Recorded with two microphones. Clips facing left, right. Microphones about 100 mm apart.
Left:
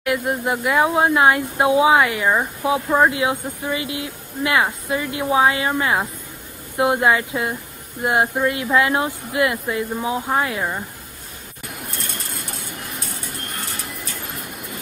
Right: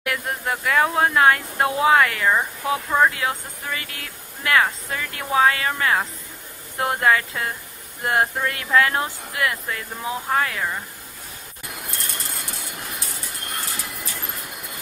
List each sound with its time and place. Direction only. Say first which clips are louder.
0.0 s speech: left 5 dB; 15° left (ahead or behind)